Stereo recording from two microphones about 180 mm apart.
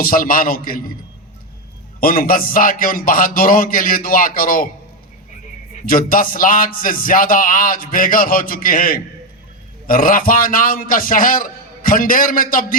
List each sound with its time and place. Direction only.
0.0 s a man's voice: 50° left (ahead or behind)
2.0 s a man's voice: 50° left (ahead or behind)
5.8 s a man's voice: 50° left (ahead or behind)